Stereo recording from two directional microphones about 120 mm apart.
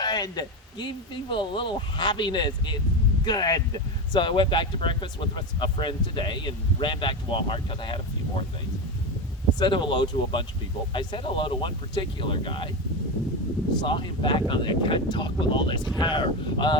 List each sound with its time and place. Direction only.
0.0 s speech: 35° left (ahead or behind)
9.6 s speech: 40° left (ahead or behind)
13.8 s speech: 40° left (ahead or behind)